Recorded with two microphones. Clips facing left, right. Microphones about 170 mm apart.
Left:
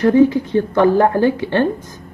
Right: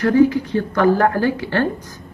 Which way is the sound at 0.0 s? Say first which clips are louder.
Left 2 dB; 20° left (ahead or behind).